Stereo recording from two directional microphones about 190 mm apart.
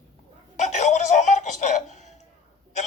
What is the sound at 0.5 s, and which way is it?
Music, 40° left (ahead or behind).